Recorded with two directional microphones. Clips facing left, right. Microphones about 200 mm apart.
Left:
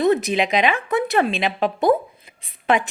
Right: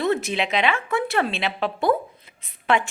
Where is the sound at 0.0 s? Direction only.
15° left (ahead or behind).